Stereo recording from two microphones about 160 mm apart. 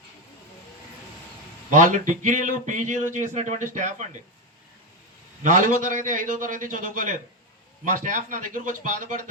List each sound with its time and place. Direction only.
1.7 s speech: 50° right (ahead or behind)
5.4 s a man's voice: 55° right (ahead or behind)